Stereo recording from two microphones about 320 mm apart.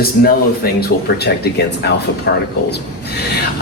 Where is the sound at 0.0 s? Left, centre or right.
Left.